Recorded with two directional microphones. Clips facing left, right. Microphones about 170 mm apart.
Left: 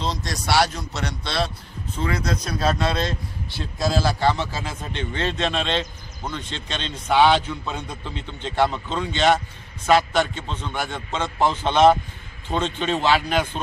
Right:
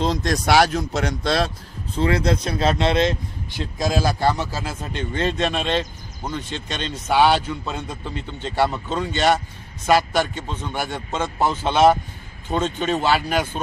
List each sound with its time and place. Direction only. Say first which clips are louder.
0.0 s speech: right 6 dB; 50° right (ahead or behind)
2.2 s a man's voice: right 3 dB; 25° right (ahead or behind); by 13.6 s 10° right (ahead or behind)